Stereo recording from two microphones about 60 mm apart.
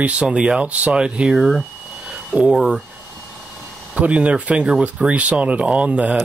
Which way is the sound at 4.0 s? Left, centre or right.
Right.